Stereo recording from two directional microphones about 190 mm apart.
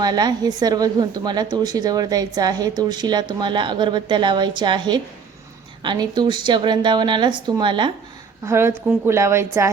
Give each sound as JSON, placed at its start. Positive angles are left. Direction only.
{"t": 0.0, "sound": "a woman's voice", "side_deg": -20}
{"t": 8.4, "sound": "a woman's voice", "side_deg": -10}